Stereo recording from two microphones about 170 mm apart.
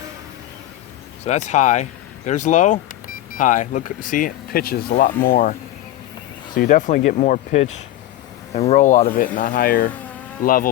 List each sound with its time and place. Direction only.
1.2 s speech: 40° left (ahead or behind)
6.6 s speech: 50° left (ahead or behind)